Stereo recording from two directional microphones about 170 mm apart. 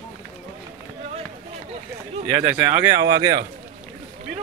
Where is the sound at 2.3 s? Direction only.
15° right (ahead or behind).